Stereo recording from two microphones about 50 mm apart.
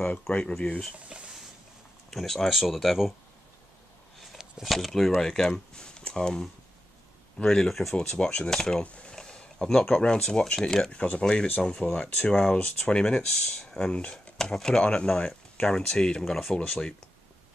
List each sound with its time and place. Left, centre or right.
0.3 s speech: centre
0.9 s speech: right
2.0 s speech: centre
4.4 s a sound: centre
4.7 s speech: centre
7.9 s speech: centre
8.8 s speech: left
10.9 s speech: left